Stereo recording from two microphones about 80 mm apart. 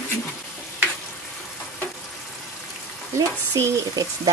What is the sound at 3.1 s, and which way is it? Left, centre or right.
Frying, right.